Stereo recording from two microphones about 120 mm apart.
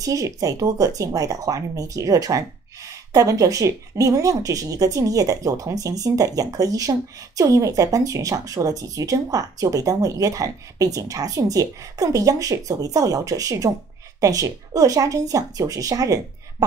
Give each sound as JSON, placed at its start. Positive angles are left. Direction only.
{"t": 0.0, "sound": "speech", "side_deg": -30}